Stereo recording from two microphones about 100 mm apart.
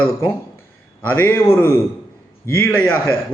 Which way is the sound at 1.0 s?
20° left (ahead or behind).